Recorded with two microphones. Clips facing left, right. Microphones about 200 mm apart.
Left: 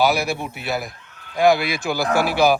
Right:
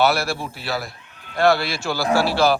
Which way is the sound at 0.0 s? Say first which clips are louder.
Even; 15° left (ahead or behind).